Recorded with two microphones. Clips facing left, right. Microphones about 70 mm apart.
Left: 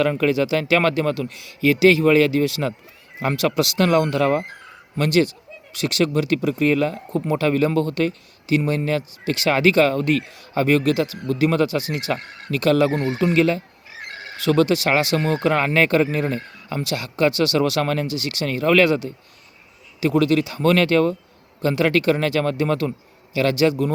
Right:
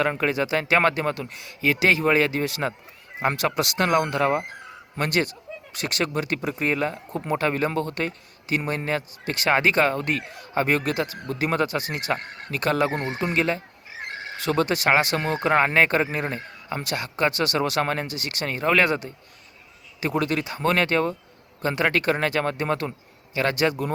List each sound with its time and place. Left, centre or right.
0.0 s speech: right
4.9 s speech: right